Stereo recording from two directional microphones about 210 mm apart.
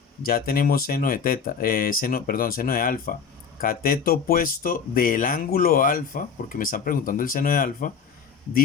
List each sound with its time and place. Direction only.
0.2 s speech: 45° left (ahead or behind)